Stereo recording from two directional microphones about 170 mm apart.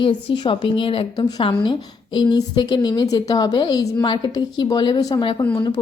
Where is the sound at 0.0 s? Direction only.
30° left (ahead or behind).